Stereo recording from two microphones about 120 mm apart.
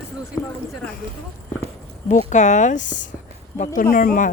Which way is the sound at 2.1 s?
85° left.